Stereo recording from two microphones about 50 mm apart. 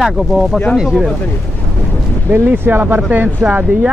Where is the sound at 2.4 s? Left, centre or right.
Right.